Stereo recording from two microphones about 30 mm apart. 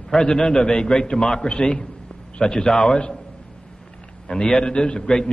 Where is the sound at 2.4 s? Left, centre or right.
Left.